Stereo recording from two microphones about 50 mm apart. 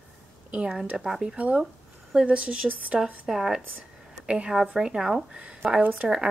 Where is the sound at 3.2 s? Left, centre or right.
Centre.